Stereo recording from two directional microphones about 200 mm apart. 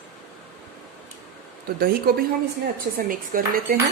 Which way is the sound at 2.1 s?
50° right (ahead or behind).